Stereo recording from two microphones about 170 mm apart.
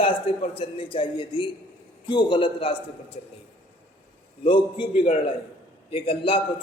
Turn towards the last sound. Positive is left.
turn(degrees=35)  # may be behind; listen again after turning